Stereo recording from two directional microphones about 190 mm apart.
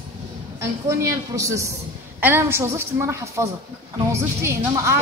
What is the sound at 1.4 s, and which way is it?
A woman's voice, 15° right (ahead or behind).